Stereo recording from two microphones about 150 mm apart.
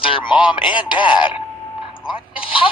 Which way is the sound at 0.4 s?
30° left (ahead or behind).